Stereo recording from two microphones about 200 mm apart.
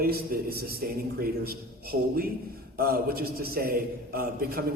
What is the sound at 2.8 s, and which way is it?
A man's voice, 50° right (ahead or behind).